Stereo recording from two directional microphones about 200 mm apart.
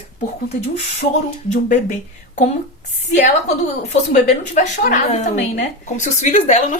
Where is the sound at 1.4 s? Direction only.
40° left (ahead or behind).